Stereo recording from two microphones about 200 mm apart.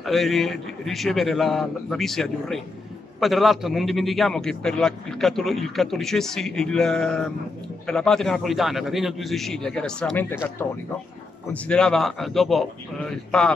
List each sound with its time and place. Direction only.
0.0 s a man's voice: centre (ahead or behind)